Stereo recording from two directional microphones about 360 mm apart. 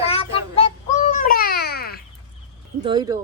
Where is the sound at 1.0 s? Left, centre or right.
Left.